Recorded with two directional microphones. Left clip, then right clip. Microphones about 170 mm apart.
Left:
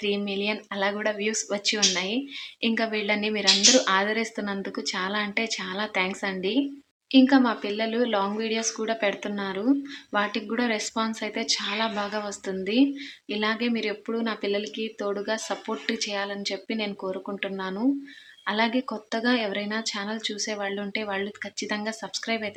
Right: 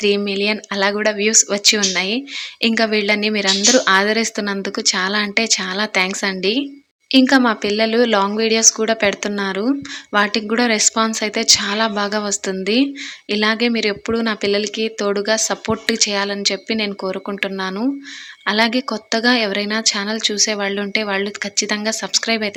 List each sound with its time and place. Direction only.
0.0 s a woman's voice: 30° right (ahead or behind)